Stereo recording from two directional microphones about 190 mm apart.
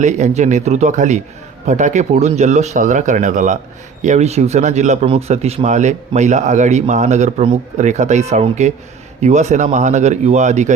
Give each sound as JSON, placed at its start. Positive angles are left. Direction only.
{"t": 0.0, "sound": "a man's voice", "side_deg": -40}